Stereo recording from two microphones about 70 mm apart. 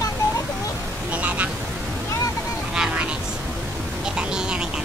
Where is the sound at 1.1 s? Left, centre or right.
Right.